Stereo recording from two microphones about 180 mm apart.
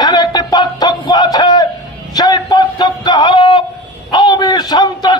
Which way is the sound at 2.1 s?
20° left (ahead or behind).